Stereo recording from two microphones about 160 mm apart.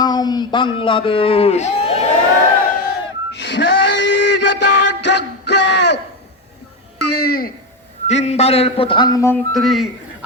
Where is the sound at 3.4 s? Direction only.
90° left.